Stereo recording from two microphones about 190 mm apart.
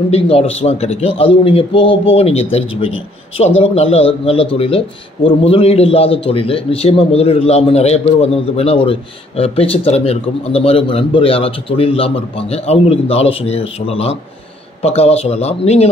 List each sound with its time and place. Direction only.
0.1 s a man's voice: 30° left (ahead or behind)